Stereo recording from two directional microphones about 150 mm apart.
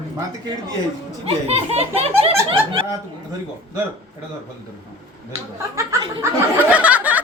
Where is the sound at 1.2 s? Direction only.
40° right (ahead or behind).